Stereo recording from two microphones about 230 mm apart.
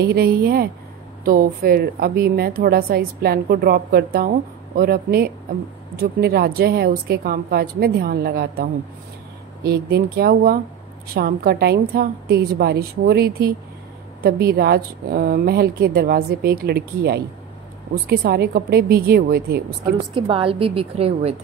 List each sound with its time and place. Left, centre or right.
0.0 s a woman's voice: right
19.8 s a woman's voice: right